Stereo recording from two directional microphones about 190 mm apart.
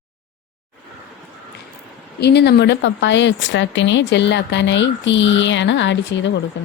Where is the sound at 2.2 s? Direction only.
60° left (ahead or behind).